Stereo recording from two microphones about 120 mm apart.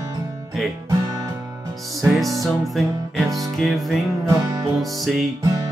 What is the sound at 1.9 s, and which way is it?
Music, centre (ahead or behind).